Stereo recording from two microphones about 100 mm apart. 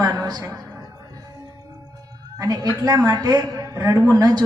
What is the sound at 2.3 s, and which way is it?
A woman's voice, 35° right (ahead or behind).